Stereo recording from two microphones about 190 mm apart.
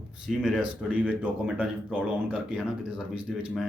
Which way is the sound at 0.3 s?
Centre (ahead or behind).